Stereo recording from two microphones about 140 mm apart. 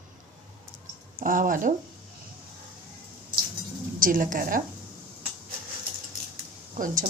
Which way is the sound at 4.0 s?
85° right.